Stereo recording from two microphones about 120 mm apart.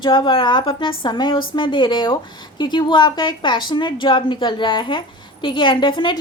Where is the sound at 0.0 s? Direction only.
40° left (ahead or behind).